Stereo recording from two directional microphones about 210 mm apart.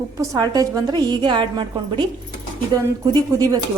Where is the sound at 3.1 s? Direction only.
15° right (ahead or behind).